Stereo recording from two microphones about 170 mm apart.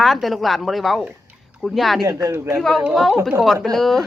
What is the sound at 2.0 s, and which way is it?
Speech, 15° right (ahead or behind).